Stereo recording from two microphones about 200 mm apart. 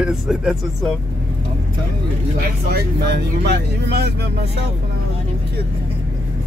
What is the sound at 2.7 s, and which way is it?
Speech, 55° right (ahead or behind).